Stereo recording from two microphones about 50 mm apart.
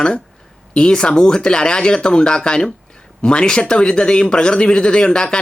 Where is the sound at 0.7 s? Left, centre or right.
Centre.